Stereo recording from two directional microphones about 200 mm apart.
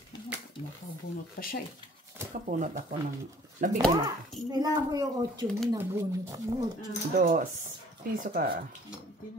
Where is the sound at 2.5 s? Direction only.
40° right (ahead or behind).